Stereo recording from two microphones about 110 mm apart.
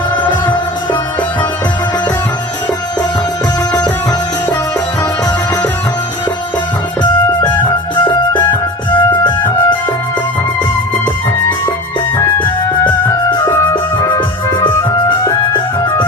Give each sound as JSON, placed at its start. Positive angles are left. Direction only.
{"t": 0.2, "sound": "music", "side_deg": 15}
{"t": 7.0, "sound": "music", "side_deg": 45}
{"t": 8.9, "sound": "music", "side_deg": 15}
{"t": 12.1, "sound": "music", "side_deg": 20}